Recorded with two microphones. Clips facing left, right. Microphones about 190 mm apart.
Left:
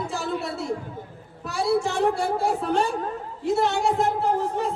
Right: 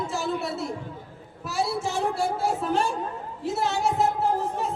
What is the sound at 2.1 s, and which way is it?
Speech, centre (ahead or behind).